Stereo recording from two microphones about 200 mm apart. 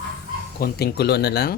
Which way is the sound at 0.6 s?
50° left (ahead or behind).